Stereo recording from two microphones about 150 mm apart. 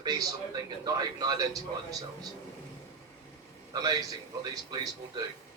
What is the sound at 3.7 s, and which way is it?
Speech, 25° right (ahead or behind).